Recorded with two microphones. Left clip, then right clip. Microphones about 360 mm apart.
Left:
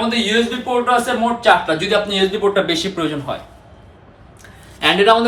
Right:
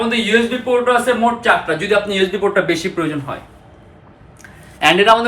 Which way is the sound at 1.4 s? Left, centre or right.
Centre.